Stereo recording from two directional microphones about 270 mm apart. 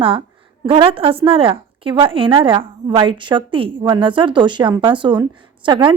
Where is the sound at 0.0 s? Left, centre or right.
Centre.